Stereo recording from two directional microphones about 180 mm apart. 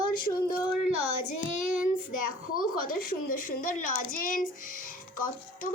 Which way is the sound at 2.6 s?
50° left (ahead or behind).